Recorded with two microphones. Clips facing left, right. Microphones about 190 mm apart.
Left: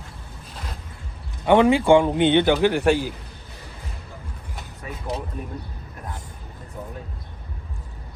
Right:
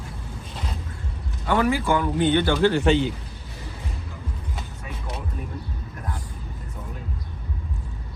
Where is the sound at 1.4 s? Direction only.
20° left (ahead or behind).